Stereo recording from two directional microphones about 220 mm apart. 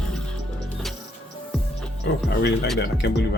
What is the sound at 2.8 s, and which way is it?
Speech, 50° left (ahead or behind).